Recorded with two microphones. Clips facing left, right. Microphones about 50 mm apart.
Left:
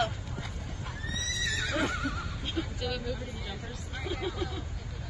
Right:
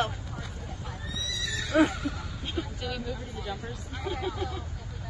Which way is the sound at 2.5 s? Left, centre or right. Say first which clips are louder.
Even; centre.